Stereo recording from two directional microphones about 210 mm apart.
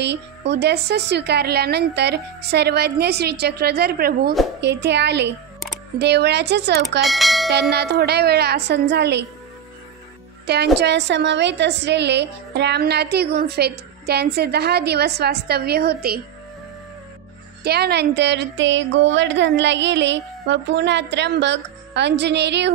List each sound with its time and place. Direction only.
0.0 s a woman's voice: 55° right (ahead or behind)
7.0 s speech: centre (ahead or behind)
7.7 s a woman's voice: 50° right (ahead or behind)
10.4 s a woman's voice: 50° right (ahead or behind)
17.6 s speech: 50° right (ahead or behind)